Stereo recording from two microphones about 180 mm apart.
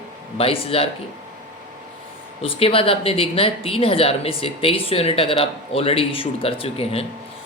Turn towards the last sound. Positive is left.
turn(degrees=35)  # may be behind; listen again after turning